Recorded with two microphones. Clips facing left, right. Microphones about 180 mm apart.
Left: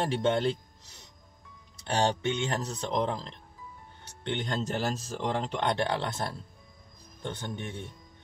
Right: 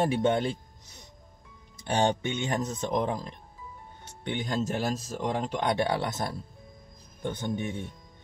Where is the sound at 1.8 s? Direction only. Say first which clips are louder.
Right 1 dB; 15° right (ahead or behind).